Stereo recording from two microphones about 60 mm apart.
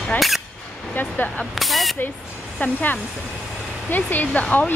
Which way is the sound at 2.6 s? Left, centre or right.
Left.